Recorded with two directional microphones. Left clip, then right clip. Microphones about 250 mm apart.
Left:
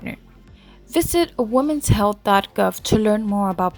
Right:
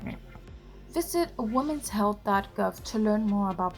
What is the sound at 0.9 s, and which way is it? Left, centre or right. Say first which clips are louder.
Speech: left 9 dB; left.